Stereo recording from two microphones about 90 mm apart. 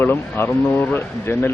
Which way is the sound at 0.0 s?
20° left (ahead or behind).